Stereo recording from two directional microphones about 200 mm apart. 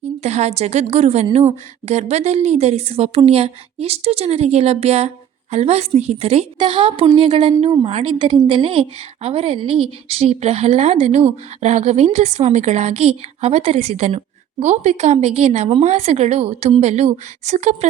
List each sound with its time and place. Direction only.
0.2 s a woman's voice: 35° right (ahead or behind)